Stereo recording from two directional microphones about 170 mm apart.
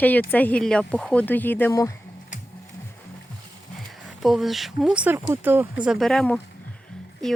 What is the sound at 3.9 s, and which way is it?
Speech, centre (ahead or behind).